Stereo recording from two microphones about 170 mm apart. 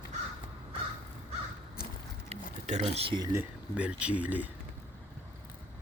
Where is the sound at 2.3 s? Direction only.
40° right (ahead or behind).